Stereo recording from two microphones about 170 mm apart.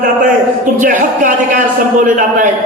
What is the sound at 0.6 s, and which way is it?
A man's voice, 50° right (ahead or behind).